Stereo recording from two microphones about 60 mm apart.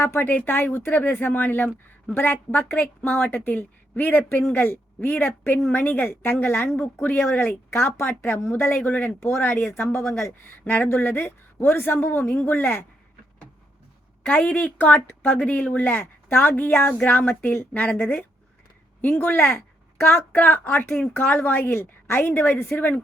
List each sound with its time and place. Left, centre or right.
0.0 s a woman's voice: left
4.5 s a woman's voice: left
4.9 s a woman's voice: left
10.6 s a woman's voice: left
14.3 s a woman's voice: left